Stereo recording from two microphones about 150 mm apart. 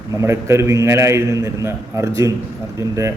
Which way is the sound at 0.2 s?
20° right (ahead or behind).